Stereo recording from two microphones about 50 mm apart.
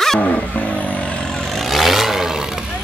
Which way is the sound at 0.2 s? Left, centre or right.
Left.